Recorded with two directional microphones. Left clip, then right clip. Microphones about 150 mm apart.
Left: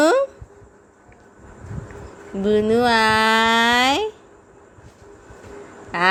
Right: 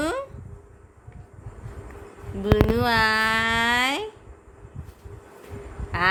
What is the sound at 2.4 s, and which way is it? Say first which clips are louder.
Speech: left 5 dB; 25° left (ahead or behind).